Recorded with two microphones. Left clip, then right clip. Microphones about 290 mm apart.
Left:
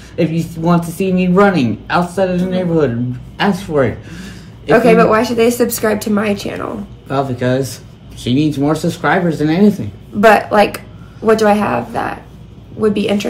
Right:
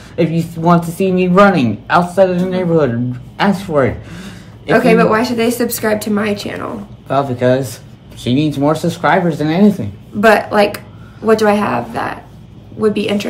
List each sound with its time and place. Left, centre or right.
0.1 s a man's voice: centre
4.6 s speech: centre
7.1 s a man's voice: centre
10.2 s speech: centre